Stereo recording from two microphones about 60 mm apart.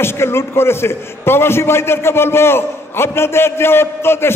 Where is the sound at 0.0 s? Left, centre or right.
Left.